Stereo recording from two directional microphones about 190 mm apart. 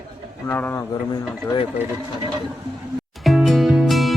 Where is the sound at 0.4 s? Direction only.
10° left (ahead or behind).